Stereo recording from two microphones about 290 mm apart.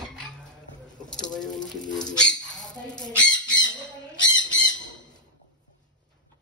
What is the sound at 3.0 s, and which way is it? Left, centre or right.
Chicken, centre.